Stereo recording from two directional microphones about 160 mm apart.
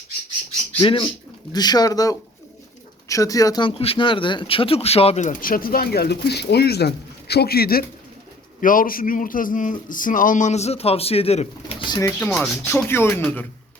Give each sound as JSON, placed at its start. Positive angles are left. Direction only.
{"t": 0.8, "sound": "speech", "side_deg": 35}
{"t": 8.6, "sound": "speech", "side_deg": 60}
{"t": 11.9, "sound": "speech", "side_deg": 20}
{"t": 12.2, "sound": "speech", "side_deg": 5}